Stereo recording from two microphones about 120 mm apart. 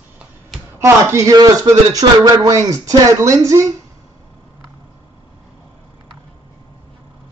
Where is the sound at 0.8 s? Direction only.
25° right (ahead or behind).